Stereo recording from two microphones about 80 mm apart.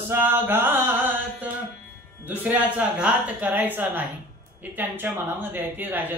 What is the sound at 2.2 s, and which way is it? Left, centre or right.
Mantra, right.